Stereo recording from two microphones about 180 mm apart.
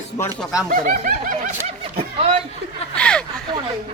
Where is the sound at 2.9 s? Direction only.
5° left (ahead or behind).